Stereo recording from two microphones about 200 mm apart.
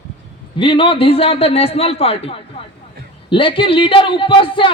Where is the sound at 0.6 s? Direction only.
25° left (ahead or behind).